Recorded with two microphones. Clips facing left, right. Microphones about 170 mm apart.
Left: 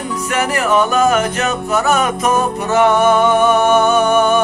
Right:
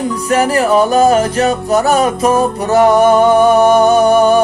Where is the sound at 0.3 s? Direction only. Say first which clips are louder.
Right 5 dB; 35° right (ahead or behind).